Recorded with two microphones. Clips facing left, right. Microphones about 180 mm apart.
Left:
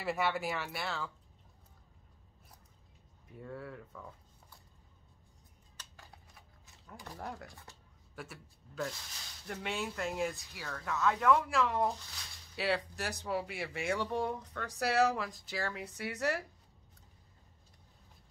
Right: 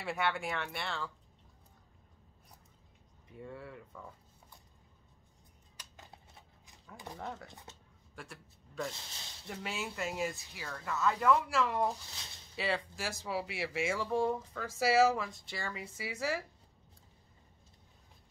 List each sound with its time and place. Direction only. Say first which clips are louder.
0.0 s speech: left 1 dB; centre (ahead or behind)
3.3 s speech: left 1 dB; centre (ahead or behind)
5.8 s a sound: right 1 dB; 20° right (ahead or behind)
7.2 s speech: even; centre (ahead or behind)
7.4 s speech: right 1 dB; 20° right (ahead or behind)
8.2 s a man's voice: left 2 dB; centre (ahead or behind)